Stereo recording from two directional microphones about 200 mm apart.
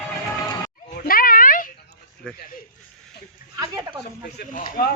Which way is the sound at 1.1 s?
45° left (ahead or behind).